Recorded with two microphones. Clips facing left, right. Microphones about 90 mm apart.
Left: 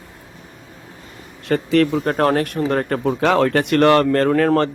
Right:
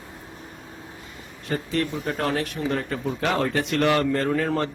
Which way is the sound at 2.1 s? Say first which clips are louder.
Left 8 dB; 50° left (ahead or behind).